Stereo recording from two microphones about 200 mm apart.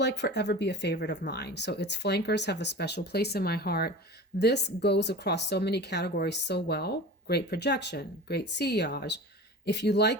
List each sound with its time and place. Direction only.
0.0 s speech: 60° left (ahead or behind)